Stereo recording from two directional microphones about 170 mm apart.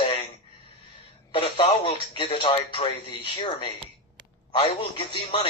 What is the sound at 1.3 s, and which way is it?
Speech, 30° left (ahead or behind).